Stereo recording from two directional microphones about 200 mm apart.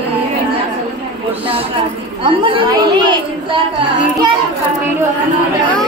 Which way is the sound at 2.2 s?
25° right (ahead or behind).